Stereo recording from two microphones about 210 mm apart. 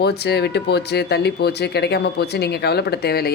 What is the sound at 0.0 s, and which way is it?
Speech, 50° left (ahead or behind).